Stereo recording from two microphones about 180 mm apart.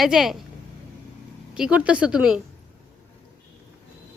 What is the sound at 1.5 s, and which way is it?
Speech, 5° right (ahead or behind).